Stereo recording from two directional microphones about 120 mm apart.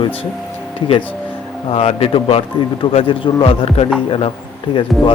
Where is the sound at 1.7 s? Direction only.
55° left (ahead or behind).